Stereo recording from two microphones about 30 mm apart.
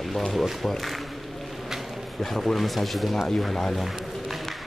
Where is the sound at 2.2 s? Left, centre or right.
Centre.